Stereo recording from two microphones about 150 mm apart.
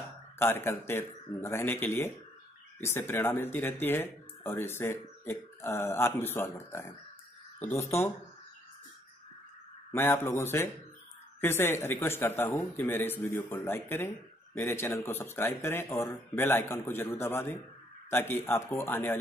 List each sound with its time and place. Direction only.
0.4 s speech: 15° left (ahead or behind)
9.8 s speech: 15° left (ahead or behind)